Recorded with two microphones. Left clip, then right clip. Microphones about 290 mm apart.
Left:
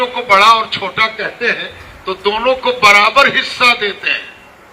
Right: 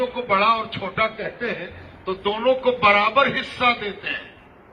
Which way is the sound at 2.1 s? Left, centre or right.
Centre.